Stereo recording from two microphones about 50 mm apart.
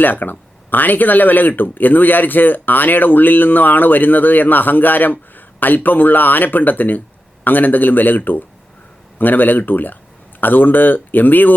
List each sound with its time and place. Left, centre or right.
0.0 s speech: left